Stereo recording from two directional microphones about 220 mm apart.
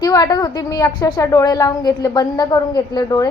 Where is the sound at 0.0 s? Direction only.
15° left (ahead or behind).